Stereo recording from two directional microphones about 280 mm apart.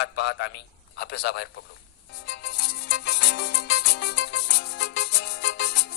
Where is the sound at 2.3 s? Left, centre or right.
Left.